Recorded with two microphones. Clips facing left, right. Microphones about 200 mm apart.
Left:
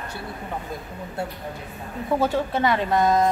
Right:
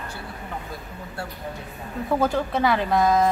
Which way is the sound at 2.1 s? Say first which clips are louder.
Even; centre (ahead or behind).